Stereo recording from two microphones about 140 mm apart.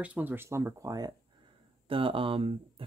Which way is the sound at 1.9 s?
40° right (ahead or behind).